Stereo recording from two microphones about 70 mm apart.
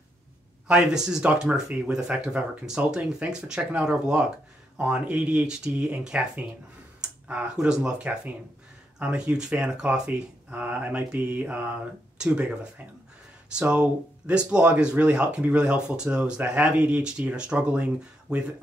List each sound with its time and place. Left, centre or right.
0.7 s speech: centre
7.0 s clicking: centre
7.5 s speech: centre
10.5 s mantra: right
12.2 s speech: centre